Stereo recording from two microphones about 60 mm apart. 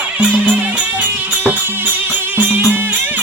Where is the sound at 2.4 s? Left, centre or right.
Right.